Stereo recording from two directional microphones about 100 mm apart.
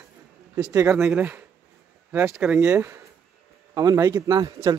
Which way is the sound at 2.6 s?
20° right (ahead or behind).